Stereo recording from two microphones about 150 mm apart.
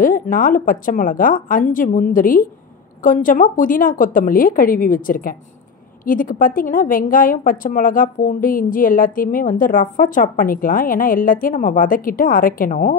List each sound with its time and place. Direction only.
0.0 s a woman's voice: 65° left (ahead or behind)